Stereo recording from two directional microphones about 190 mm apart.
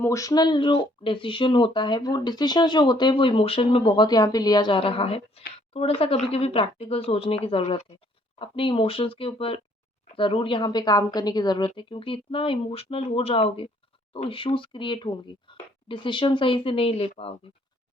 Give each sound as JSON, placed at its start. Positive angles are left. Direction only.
{"t": 0.0, "sound": "speech", "side_deg": 15}